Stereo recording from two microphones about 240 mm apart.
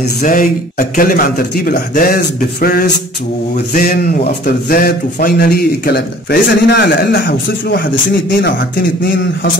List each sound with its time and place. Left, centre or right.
0.2 s a man's voice: left